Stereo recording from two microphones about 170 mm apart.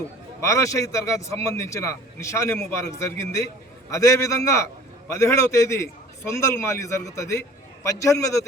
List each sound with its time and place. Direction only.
0.4 s a man's voice: 20° left (ahead or behind)